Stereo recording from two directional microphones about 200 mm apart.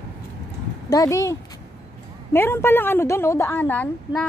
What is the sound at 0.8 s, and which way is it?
A woman's voice, 15° left (ahead or behind).